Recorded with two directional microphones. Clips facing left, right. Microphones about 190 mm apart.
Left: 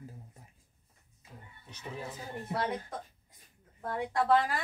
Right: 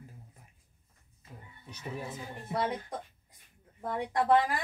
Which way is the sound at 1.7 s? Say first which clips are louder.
Right 2 dB; 10° right (ahead or behind).